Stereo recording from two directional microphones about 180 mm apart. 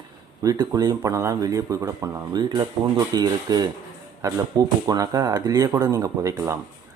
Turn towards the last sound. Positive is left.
turn(degrees=-15)  # may be behind; listen again after turning